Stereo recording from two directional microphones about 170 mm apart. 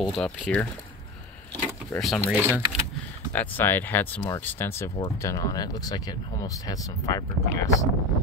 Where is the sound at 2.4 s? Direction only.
15° right (ahead or behind).